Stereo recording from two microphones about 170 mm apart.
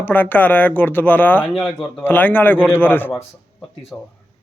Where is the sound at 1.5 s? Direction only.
Centre (ahead or behind).